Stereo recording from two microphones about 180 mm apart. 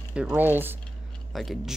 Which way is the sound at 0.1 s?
10° right (ahead or behind).